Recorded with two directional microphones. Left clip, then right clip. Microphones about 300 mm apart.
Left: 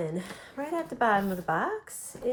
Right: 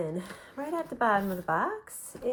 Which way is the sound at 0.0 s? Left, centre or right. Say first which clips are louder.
Left 1 dB; centre.